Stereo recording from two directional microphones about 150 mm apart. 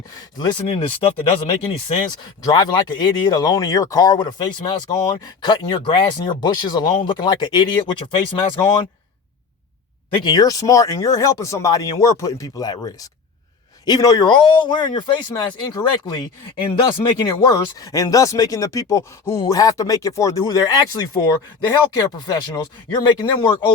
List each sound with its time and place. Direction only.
0.3 s a man's voice: 30° left (ahead or behind)
10.2 s a man's voice: 25° left (ahead or behind)